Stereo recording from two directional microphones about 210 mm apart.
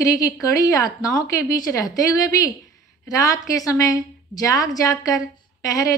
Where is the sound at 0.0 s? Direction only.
15° left (ahead or behind).